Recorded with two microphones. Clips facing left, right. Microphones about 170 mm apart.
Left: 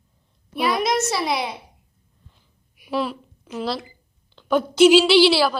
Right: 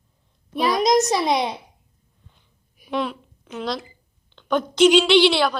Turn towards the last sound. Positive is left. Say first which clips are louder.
# left 1 dB
turn(degrees=5)  # may be behind; listen again after turning